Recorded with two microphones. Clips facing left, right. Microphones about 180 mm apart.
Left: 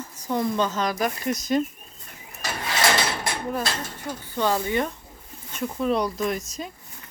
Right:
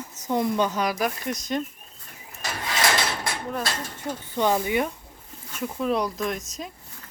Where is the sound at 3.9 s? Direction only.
25° right (ahead or behind); by 6.4 s centre (ahead or behind).